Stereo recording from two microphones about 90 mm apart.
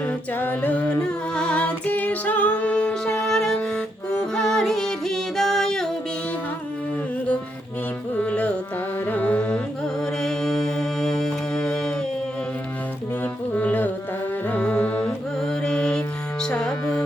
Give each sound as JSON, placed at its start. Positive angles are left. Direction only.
{"t": 0.3, "sound": "music", "side_deg": 20}
{"t": 8.2, "sound": "carnatic music", "side_deg": 15}
{"t": 9.0, "sound": "music", "side_deg": 20}
{"t": 13.5, "sound": "music", "side_deg": 20}